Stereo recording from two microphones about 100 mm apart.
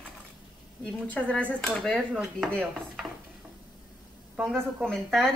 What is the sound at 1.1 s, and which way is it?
Speech, 15° left (ahead or behind).